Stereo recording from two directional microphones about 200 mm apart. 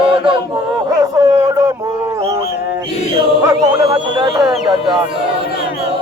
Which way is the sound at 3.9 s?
20° right (ahead or behind).